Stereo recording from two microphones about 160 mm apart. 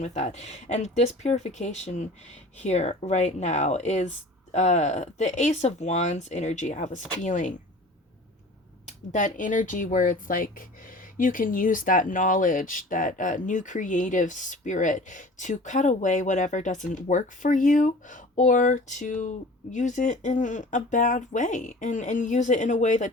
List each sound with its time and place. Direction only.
0.0 s speech: 45° left (ahead or behind)
8.9 s speech: 50° left (ahead or behind)